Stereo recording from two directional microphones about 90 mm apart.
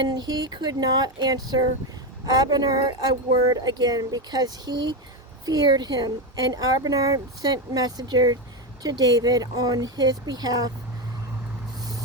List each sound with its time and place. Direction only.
0.0 s speech: 50° right (ahead or behind)